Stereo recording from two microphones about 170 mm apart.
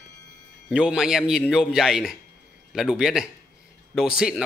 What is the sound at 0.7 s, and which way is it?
A man's voice, 5° right (ahead or behind).